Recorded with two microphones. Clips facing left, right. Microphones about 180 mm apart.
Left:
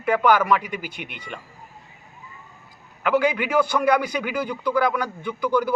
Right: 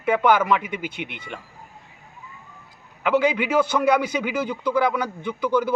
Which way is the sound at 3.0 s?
20° right (ahead or behind).